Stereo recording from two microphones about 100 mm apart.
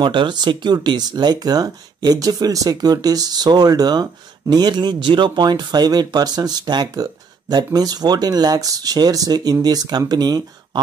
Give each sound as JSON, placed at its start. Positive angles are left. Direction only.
{"t": 0.0, "sound": "speech", "side_deg": -50}